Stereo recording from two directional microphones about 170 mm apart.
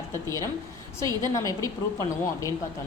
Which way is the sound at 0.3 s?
20° left (ahead or behind).